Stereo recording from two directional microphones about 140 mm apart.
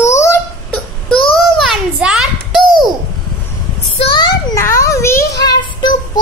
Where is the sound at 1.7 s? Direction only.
5° right (ahead or behind).